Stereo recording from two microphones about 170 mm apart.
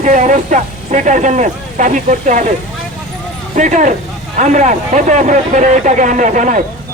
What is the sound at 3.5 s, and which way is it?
Speech, 45° right (ahead or behind).